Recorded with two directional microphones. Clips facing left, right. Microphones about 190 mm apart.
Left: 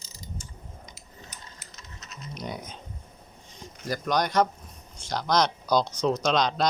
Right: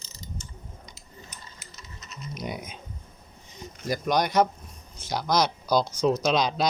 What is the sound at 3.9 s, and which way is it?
Speech, 10° right (ahead or behind).